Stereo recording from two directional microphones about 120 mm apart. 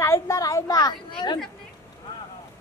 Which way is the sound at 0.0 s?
25° left (ahead or behind).